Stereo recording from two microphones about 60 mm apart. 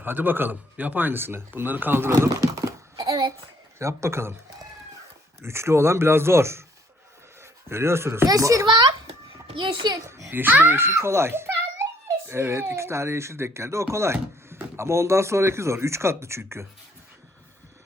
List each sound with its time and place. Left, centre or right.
0.0 s a man's voice: right
2.3 s a sound: right
3.8 s speech: right
5.4 s speech: right
7.7 s speech: right
8.3 s a child's voice: right
10.3 s speech: right